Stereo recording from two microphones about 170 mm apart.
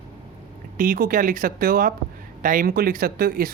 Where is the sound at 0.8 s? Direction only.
55° right (ahead or behind).